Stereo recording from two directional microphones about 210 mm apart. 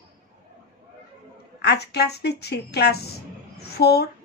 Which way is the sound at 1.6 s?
50° left (ahead or behind).